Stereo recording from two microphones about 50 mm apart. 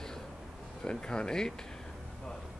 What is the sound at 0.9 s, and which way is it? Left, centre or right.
Speech, centre.